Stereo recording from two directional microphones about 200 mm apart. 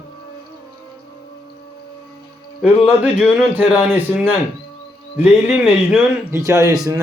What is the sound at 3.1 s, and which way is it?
A man's voice, centre (ahead or behind).